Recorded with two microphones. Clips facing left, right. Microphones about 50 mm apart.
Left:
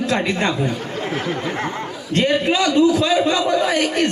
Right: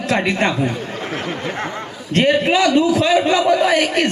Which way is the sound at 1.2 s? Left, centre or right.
Right.